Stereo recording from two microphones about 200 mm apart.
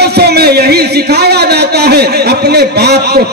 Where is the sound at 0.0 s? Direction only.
55° right (ahead or behind).